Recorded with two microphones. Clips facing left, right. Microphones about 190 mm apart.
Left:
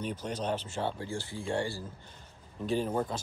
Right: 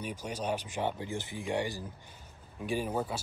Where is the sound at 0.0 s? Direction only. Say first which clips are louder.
Left 2 dB; 10° right (ahead or behind).